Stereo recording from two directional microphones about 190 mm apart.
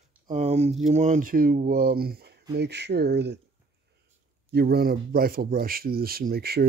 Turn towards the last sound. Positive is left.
turn(degrees=-55)  # may be behind; listen again after turning